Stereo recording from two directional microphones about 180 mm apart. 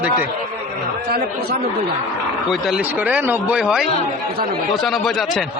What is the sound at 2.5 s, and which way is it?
A man's voice, 5° right (ahead or behind).